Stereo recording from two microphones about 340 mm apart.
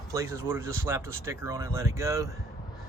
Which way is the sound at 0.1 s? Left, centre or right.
Centre.